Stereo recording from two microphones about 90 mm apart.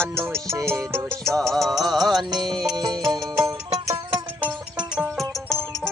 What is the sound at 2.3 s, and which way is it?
Music, 55° right (ahead or behind).